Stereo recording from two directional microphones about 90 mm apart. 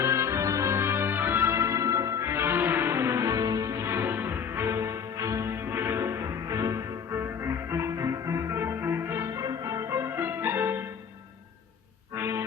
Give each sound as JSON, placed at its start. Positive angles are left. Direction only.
{"t": 0.0, "sound": "music", "side_deg": -30}
{"t": 12.1, "sound": "music", "side_deg": -30}